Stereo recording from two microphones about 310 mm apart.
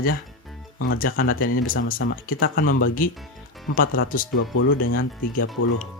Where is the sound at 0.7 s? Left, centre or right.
Left.